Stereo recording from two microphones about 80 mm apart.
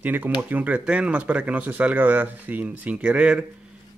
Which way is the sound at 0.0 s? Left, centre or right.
Right.